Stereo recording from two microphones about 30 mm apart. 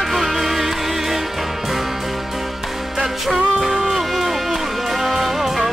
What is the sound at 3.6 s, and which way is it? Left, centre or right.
Music, centre.